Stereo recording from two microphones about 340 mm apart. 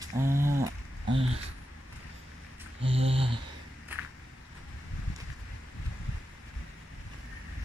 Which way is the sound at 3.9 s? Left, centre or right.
Centre.